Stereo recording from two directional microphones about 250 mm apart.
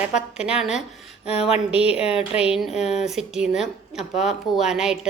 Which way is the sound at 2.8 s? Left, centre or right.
Left.